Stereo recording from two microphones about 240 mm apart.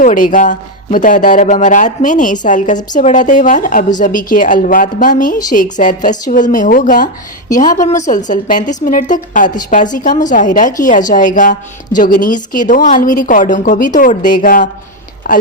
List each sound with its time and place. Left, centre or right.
0.0 s a woman's voice: left